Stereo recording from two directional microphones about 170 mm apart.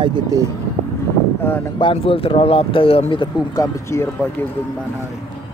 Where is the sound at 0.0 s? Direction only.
25° right (ahead or behind).